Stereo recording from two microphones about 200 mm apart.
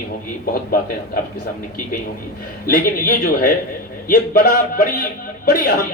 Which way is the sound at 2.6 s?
45° left (ahead or behind).